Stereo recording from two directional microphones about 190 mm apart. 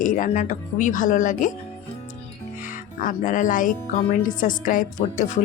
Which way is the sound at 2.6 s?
45° left (ahead or behind).